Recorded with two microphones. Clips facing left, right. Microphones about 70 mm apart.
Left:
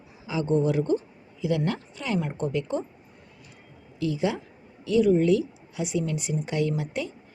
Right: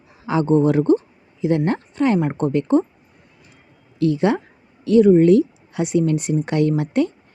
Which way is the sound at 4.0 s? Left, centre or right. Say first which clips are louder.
Right 9 dB; right.